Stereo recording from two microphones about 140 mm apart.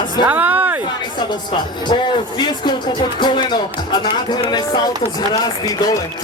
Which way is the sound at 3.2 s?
35° left (ahead or behind).